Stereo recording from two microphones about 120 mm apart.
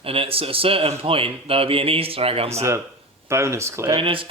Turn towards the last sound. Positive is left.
turn(degrees=-50)  # may be behind; listen again after turning